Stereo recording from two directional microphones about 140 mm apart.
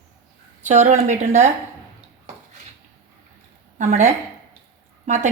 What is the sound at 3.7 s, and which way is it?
Speech, 75° right (ahead or behind).